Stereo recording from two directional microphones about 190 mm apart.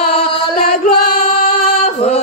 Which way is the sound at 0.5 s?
45° left (ahead or behind).